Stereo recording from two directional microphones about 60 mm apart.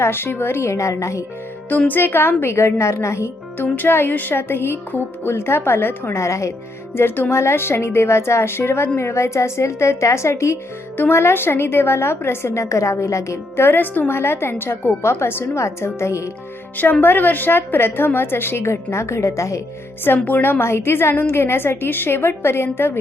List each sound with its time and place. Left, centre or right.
0.0 s a woman's voice: left
0.8 s speech: left
1.9 s a woman's voice: left
3.6 s a woman's voice: left
6.1 s speech: left
6.9 s a woman's voice: left
13.6 s a woman's voice: left
15.5 s a woman's voice: left
16.7 s a woman's voice: left
20.1 s a woman's voice: left